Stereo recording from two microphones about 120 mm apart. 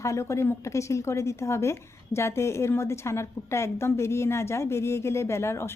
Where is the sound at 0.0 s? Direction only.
25° left (ahead or behind).